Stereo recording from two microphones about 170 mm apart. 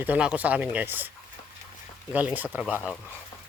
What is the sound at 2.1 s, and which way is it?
Speech, 10° right (ahead or behind).